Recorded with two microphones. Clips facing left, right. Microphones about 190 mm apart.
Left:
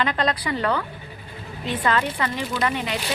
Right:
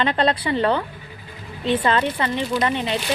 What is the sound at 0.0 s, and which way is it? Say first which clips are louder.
Speech: right 3 dB; 30° right (ahead or behind).